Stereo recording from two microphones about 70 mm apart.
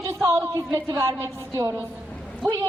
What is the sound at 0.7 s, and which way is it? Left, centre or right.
A woman's voice, right.